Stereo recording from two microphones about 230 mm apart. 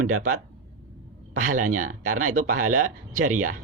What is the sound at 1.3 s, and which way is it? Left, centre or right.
A man's voice, right.